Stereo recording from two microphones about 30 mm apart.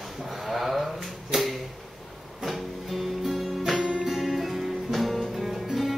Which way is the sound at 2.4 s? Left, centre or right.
Centre.